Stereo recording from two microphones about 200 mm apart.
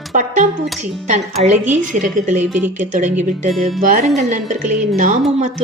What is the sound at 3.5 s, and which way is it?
Speech, centre (ahead or behind).